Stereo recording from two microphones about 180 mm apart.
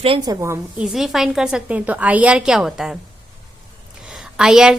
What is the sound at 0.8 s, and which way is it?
A woman's voice, centre (ahead or behind).